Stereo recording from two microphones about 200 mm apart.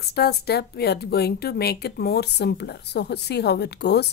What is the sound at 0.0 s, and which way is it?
Speech, 55° left (ahead or behind).